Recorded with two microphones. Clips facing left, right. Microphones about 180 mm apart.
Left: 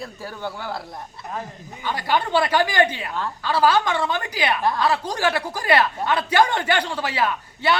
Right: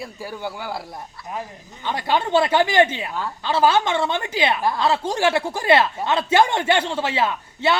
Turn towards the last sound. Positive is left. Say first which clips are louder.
# right 1 dB
turn(degrees=-25)  # may be behind; listen again after turning